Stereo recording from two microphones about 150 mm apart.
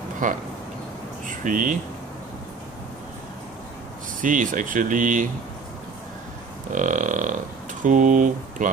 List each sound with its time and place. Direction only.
0.2 s speech: 60° right (ahead or behind)
4.2 s speech: 60° right (ahead or behind)
6.7 s speech: 60° right (ahead or behind)